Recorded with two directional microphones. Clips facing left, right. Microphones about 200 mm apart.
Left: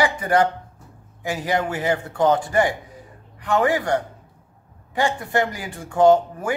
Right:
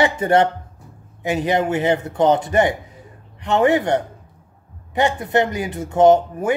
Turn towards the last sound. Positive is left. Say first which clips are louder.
# right 2 dB
turn(degrees=-20)  # may be behind; listen again after turning